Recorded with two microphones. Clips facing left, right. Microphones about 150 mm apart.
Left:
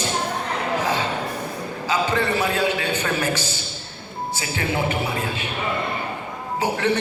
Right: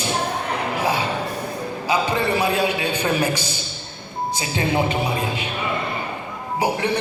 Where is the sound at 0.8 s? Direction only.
10° right (ahead or behind).